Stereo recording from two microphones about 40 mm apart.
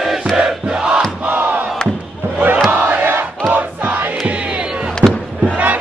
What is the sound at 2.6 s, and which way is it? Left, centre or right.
Crowd, right.